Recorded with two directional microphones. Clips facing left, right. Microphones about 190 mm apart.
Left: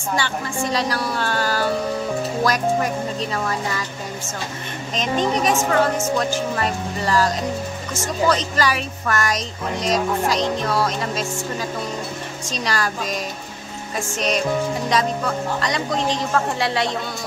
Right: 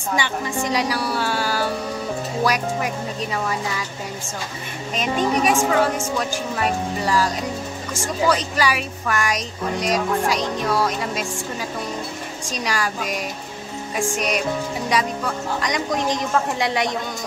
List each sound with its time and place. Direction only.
0.1 s a woman's voice: 15° right (ahead or behind)
4.9 s a woman's voice: 10° right (ahead or behind)
12.4 s a woman's voice: 10° right (ahead or behind)